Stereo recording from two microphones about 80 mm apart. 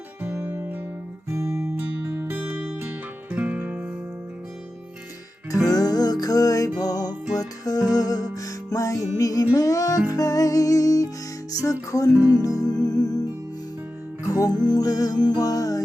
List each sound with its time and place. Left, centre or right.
0.2 s music: right
5.6 s music: left
12.0 s music: right
12.3 s music: left
14.3 s music: left